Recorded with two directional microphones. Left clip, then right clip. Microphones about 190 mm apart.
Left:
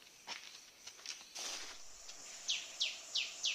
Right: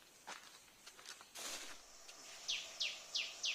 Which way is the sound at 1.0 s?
45° right (ahead or behind).